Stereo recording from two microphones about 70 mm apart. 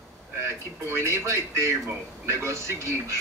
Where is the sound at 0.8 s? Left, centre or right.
Right.